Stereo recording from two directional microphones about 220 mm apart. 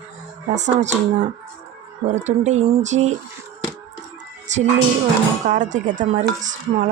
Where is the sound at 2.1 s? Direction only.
30° right (ahead or behind).